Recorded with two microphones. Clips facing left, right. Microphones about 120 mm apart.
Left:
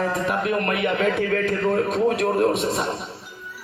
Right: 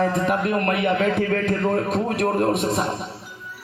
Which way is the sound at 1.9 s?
50° right (ahead or behind).